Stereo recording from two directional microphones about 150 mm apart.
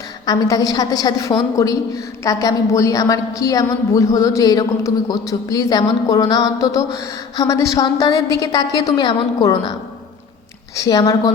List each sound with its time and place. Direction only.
0.3 s a woman's voice: 25° left (ahead or behind)
10.8 s a woman's voice: 25° left (ahead or behind)